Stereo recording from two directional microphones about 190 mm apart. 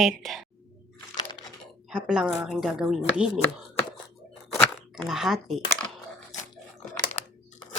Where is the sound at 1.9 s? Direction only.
5° right (ahead or behind).